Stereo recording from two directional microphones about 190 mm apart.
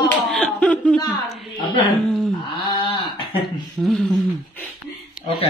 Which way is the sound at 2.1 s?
5° left (ahead or behind).